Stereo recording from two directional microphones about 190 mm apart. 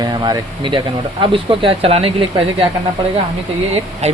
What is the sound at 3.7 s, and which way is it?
Speech, 35° right (ahead or behind).